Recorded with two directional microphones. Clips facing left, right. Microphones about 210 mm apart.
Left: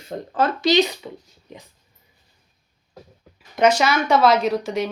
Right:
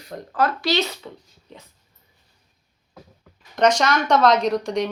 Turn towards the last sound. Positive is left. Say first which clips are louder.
# even
turn(degrees=5)  # may be behind; listen again after turning